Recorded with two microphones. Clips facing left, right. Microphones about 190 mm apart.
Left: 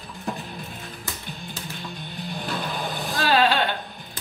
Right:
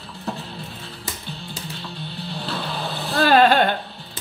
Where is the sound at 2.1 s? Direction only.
15° left (ahead or behind).